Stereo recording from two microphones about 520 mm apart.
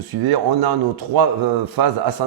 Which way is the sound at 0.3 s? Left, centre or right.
Right.